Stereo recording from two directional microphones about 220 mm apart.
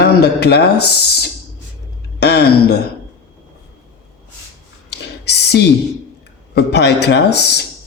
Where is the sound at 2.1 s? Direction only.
50° left (ahead or behind).